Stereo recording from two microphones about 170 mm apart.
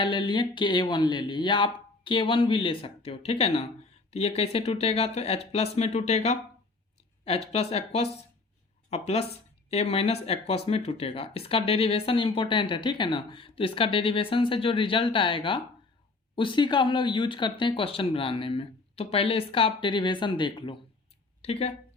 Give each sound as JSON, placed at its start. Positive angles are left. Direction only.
{"t": 0.0, "sound": "speech", "side_deg": 25}